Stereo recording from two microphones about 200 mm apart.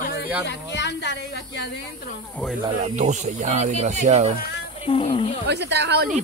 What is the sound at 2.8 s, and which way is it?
Speech, 35° right (ahead or behind).